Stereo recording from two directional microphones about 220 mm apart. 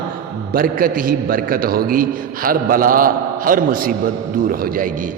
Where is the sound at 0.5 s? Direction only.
40° right (ahead or behind).